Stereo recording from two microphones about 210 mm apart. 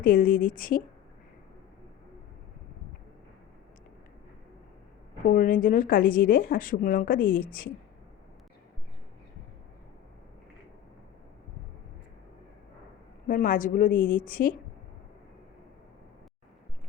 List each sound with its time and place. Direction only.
0.0 s speech: 40° left (ahead or behind)
5.3 s speech: 40° left (ahead or behind)
13.2 s speech: 40° left (ahead or behind)